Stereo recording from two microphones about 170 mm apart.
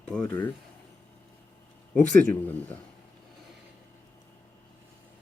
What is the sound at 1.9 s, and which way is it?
Speech, 10° left (ahead or behind).